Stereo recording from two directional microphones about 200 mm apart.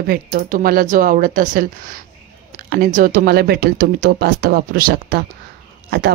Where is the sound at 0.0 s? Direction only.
45° right (ahead or behind).